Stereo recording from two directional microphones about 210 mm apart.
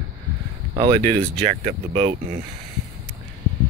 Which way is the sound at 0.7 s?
25° right (ahead or behind).